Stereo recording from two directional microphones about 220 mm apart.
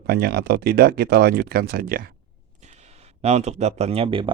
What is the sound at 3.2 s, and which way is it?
Speech, 30° right (ahead or behind).